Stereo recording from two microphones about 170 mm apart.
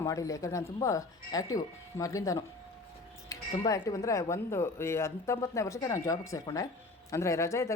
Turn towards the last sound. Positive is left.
turn(degrees=15)  # may be behind; listen again after turning